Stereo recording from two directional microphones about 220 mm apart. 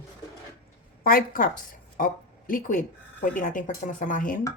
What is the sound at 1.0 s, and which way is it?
Speech, 40° left (ahead or behind).